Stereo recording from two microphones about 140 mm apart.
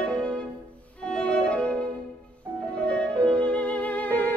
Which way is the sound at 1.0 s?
5° left (ahead or behind).